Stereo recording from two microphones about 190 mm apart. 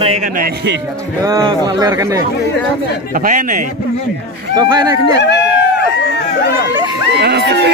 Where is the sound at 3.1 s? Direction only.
45° right (ahead or behind).